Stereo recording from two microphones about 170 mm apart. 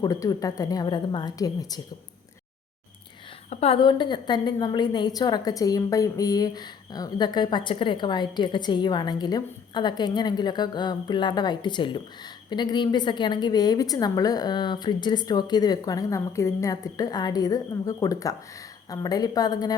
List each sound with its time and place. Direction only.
0.0 s a woman's voice: 20° left (ahead or behind)
3.5 s a woman's voice: 35° left (ahead or behind)